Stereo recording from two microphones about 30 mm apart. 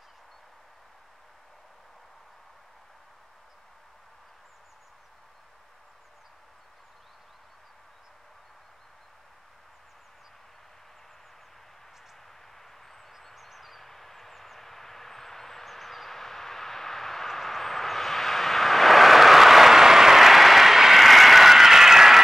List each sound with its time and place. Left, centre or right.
13.2 s vehicle: centre